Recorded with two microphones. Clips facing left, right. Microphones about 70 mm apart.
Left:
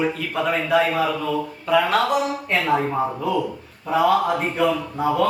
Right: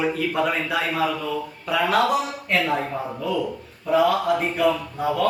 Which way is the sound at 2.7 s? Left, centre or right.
Left.